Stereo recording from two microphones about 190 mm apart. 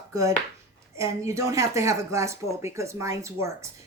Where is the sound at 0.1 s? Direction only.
15° right (ahead or behind).